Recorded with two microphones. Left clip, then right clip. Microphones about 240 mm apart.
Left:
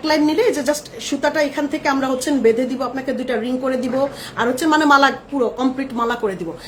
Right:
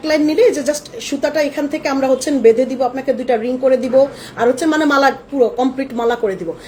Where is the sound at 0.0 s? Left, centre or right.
Centre.